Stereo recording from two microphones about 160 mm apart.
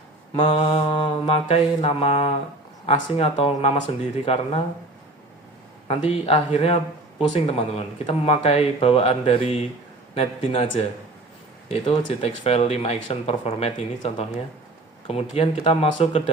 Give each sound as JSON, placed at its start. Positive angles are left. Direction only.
{"t": 0.3, "sound": "speech", "side_deg": 40}
{"t": 5.9, "sound": "speech", "side_deg": 35}